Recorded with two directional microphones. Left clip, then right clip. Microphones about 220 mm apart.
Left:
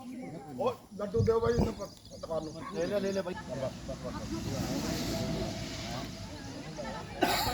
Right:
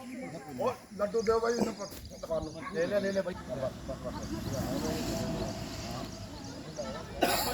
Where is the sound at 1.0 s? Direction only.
Centre (ahead or behind).